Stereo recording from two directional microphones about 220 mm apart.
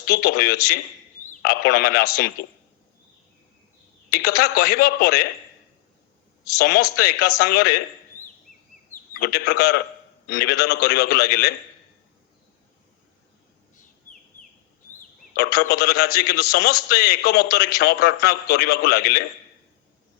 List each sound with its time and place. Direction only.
0.0 s a man's voice: 45° left (ahead or behind)
4.1 s a man's voice: 45° left (ahead or behind)
6.6 s a man's voice: 45° left (ahead or behind)
9.1 s a man's voice: 45° left (ahead or behind)
15.4 s a man's voice: 45° left (ahead or behind)